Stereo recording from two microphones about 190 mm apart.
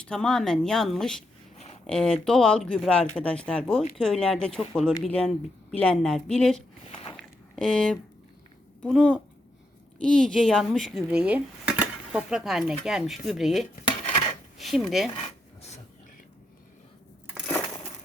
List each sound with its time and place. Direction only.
0.0 s speech: 5° left (ahead or behind)
6.9 s walk: 25° left (ahead or behind)
7.2 s a sound: 5° left (ahead or behind)
8.8 s speech: 5° left (ahead or behind)